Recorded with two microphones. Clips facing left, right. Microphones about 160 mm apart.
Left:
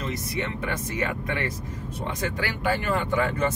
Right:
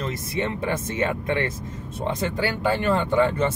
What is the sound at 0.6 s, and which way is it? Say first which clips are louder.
Speech: right 4 dB; 25° right (ahead or behind).